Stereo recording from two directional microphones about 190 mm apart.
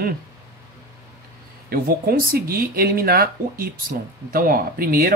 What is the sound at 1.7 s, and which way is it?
Speech, 50° right (ahead or behind).